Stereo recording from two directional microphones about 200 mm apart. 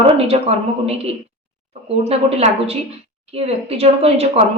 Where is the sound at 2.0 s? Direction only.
30° right (ahead or behind).